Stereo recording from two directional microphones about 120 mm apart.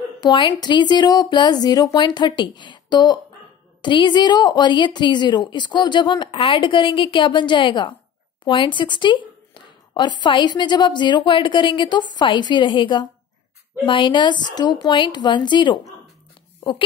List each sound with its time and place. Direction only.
0.2 s a woman's voice: 40° left (ahead or behind)